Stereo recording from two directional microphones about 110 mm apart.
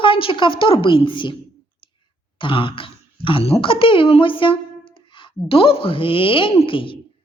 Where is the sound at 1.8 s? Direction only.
45° left (ahead or behind).